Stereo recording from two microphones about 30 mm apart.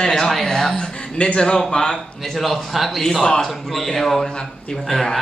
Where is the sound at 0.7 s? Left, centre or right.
Left.